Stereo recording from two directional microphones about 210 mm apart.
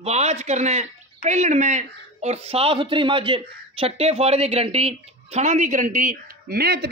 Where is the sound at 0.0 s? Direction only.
30° right (ahead or behind).